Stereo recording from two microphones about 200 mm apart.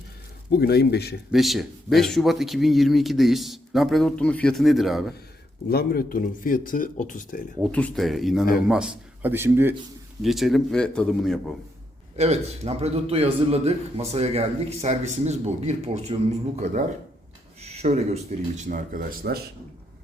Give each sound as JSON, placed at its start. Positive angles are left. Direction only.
{"t": 0.5, "sound": "speech", "side_deg": 55}
{"t": 1.3, "sound": "speech", "side_deg": 0}
{"t": 5.6, "sound": "speech", "side_deg": 50}
{"t": 7.6, "sound": "a man's voice", "side_deg": 5}
{"t": 10.2, "sound": "speech", "side_deg": 0}
{"t": 12.1, "sound": "a man's voice", "side_deg": -35}
{"t": 17.6, "sound": "a man's voice", "side_deg": -30}